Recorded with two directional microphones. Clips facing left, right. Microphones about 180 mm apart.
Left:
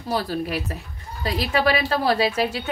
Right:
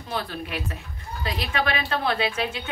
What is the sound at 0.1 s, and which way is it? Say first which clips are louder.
A woman's voice: left 6 dB; 40° left (ahead or behind).